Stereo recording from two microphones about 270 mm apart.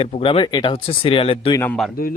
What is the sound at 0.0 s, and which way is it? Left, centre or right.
Speech, centre.